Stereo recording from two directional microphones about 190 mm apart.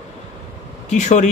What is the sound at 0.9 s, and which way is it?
Speech, 40° left (ahead or behind).